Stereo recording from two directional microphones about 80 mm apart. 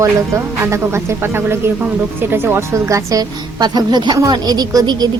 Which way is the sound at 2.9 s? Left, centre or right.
Right.